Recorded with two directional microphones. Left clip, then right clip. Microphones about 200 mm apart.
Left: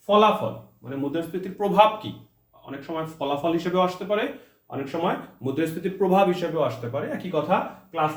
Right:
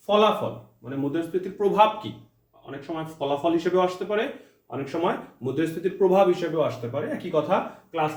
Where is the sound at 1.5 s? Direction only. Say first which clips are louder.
Left 1 dB; 25° left (ahead or behind).